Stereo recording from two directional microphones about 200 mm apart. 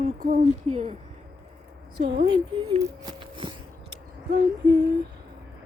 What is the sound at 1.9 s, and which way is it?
Speech, 55° right (ahead or behind).